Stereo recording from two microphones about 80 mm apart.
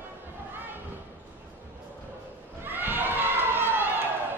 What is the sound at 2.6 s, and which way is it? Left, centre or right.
Run, right.